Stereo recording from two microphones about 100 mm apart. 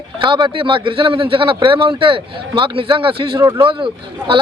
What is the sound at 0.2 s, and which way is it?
Speech, 50° right (ahead or behind).